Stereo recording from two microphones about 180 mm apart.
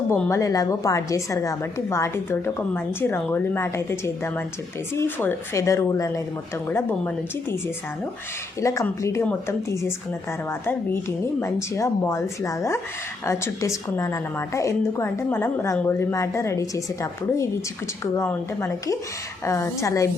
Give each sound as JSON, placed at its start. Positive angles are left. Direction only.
{"t": 0.1, "sound": "a woman's voice", "side_deg": 15}
{"t": 8.6, "sound": "a woman's voice", "side_deg": 15}
{"t": 11.3, "sound": "a woman's voice", "side_deg": 15}